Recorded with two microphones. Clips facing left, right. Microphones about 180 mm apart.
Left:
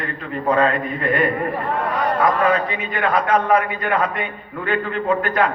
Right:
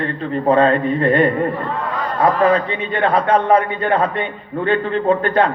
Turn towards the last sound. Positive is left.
turn(degrees=-30)  # may be behind; listen again after turning